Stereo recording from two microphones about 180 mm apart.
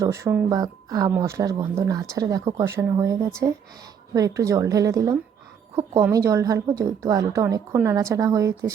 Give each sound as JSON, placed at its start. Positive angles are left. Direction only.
{"t": 0.0, "sound": "a woman's voice", "side_deg": -15}